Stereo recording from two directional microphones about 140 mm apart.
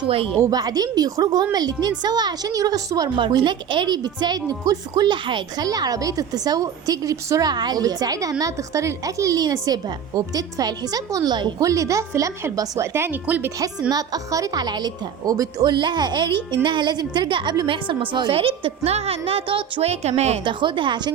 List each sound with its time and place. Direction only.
0.4 s a woman's voice: 25° right (ahead or behind)
13.9 s a woman's voice: 25° right (ahead or behind); by 20.4 s 50° right (ahead or behind)
20.4 s a woman's voice: 35° right (ahead or behind)